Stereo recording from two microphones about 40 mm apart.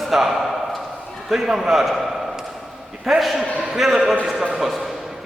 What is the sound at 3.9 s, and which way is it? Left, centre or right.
Speech, centre.